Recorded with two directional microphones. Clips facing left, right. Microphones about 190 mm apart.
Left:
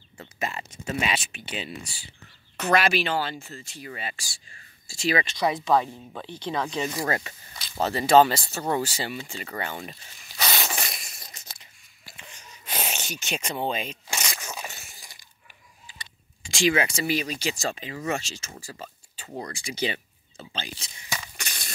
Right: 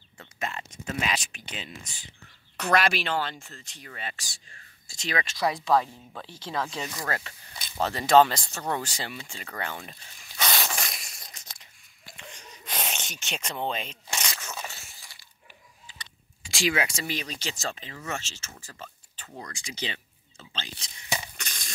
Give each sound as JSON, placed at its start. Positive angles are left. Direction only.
{"t": 0.2, "sound": "speech", "side_deg": 5}
{"t": 7.1, "sound": "speech", "side_deg": 15}
{"t": 7.8, "sound": "speech", "side_deg": 5}
{"t": 9.8, "sound": "a sound", "side_deg": 0}
{"t": 16.4, "sound": "speech", "side_deg": 0}
{"t": 21.4, "sound": "a sound", "side_deg": 5}